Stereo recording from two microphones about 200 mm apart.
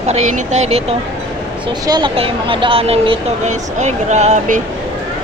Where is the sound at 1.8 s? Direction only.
25° right (ahead or behind).